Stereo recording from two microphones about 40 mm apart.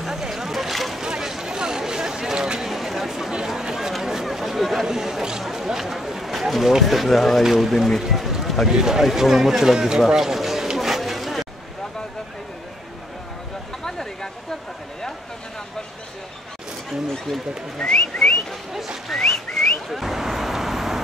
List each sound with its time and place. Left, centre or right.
0.0 s boat: centre
1.0 s vehicle: centre
2.7 s a sound: centre
3.6 s run: centre
3.9 s a sound: centre
4.8 s speech: centre
7.4 s speech: centre
10.8 s a sound: centre
13.8 s a sound: centre
17.1 s speech: centre
17.8 s whistling: left
19.9 s vehicle: centre